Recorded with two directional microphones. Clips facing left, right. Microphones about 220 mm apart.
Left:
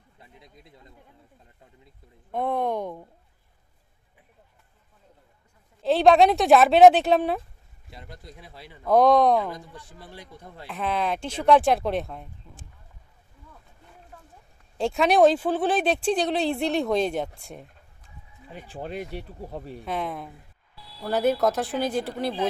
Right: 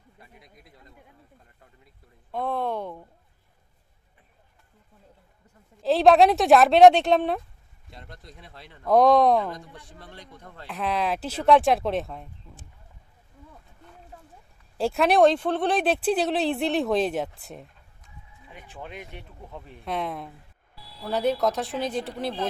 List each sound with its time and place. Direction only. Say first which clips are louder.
0.2 s speech: left 2 dB; 25° left (ahead or behind)
2.3 s speech: left 2 dB; 20° left (ahead or behind)
5.8 s speech: even; centre (ahead or behind)
10.7 s speech: even; centre (ahead or behind)
14.8 s speech: even; centre (ahead or behind)
18.0 s speech: left 2 dB; 35° left (ahead or behind)
19.8 s speech: right 1 dB; centre (ahead or behind)